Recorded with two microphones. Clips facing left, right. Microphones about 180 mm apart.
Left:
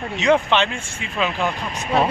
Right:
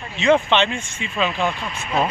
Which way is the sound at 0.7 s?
55° left (ahead or behind).